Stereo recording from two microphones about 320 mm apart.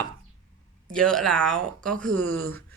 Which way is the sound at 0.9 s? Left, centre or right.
Centre.